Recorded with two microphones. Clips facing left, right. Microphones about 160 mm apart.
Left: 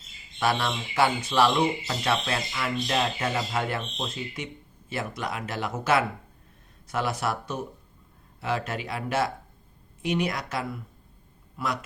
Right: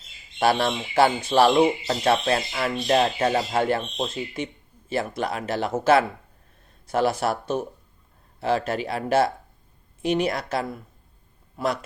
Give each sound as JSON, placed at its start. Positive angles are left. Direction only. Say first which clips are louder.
{"t": 0.3, "sound": "speech", "louder": "right 5 dB", "side_deg": -30}